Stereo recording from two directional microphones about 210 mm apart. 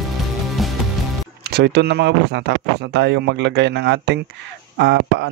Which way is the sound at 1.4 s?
50° right (ahead or behind).